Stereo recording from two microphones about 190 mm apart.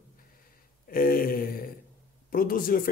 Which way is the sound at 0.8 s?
50° left (ahead or behind).